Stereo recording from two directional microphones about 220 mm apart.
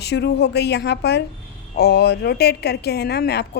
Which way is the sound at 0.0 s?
50° left (ahead or behind).